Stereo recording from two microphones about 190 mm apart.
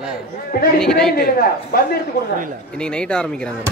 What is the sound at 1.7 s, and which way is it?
Speech, 50° left (ahead or behind).